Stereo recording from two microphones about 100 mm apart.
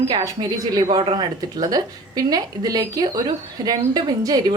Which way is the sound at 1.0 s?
60° right (ahead or behind).